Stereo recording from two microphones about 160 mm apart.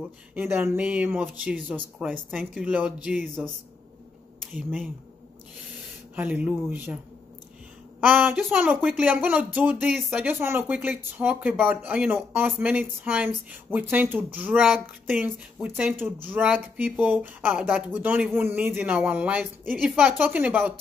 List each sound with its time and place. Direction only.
0.3 s speech: 15° right (ahead or behind)
4.6 s speech: 10° right (ahead or behind)
6.1 s speech: 10° right (ahead or behind)
8.0 s speech: 10° right (ahead or behind)